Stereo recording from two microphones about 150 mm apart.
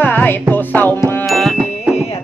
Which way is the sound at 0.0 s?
10° left (ahead or behind).